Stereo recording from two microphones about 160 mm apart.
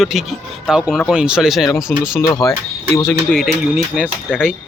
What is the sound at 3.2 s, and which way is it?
Speech, centre (ahead or behind).